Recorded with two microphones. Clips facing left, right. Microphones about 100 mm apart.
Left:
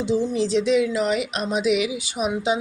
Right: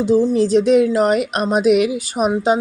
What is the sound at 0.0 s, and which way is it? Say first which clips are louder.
A woman's voice: right 7 dB; 40° right (ahead or behind).